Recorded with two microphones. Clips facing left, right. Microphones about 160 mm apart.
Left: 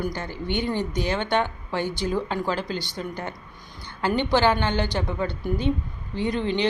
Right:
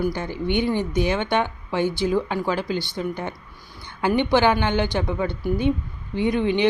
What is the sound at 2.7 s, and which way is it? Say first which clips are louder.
Speech: right 4 dB; 15° left (ahead or behind).